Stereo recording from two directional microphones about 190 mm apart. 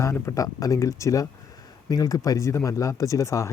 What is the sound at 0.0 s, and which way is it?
Speech, 15° left (ahead or behind).